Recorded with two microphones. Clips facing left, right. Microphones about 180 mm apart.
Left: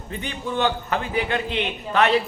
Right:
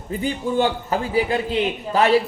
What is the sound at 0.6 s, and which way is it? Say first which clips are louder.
Speech: right 1 dB; 30° right (ahead or behind).